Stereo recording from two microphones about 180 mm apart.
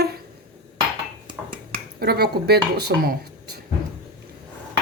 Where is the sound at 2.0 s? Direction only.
60° right (ahead or behind).